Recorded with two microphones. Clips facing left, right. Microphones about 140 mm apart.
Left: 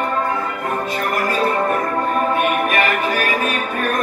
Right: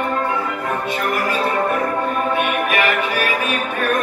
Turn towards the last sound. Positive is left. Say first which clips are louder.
# even
turn(degrees=40)  # may be behind; listen again after turning